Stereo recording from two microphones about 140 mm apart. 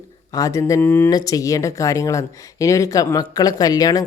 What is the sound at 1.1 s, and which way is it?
Speech, 25° left (ahead or behind).